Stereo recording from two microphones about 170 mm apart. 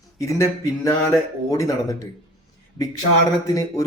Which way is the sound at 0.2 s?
15° left (ahead or behind).